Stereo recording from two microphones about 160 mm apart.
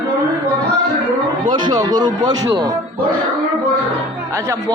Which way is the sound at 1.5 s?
25° right (ahead or behind).